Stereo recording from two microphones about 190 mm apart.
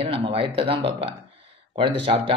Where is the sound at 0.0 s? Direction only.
30° right (ahead or behind).